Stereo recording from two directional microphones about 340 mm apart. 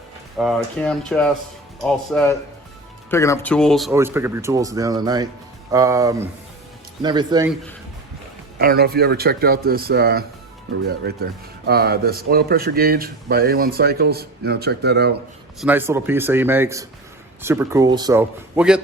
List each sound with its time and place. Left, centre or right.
0.3 s speech: centre
8.5 s speech: right
15.6 s speech: centre